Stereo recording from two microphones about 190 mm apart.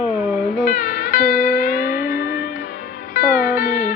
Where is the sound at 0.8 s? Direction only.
50° left (ahead or behind).